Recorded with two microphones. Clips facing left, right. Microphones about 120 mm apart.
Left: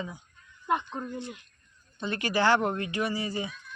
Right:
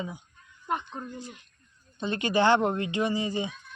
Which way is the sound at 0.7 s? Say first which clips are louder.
Left 3 dB; 5° left (ahead or behind).